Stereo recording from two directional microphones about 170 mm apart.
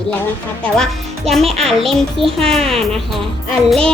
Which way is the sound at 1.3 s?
Centre (ahead or behind).